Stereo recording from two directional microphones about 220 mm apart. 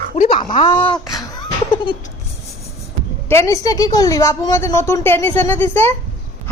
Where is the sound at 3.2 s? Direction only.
15° left (ahead or behind).